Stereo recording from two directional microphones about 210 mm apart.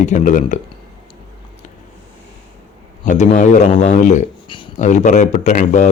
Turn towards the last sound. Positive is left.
turn(degrees=40)  # may be behind; listen again after turning